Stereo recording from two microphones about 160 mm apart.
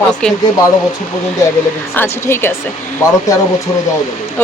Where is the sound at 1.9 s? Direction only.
15° left (ahead or behind).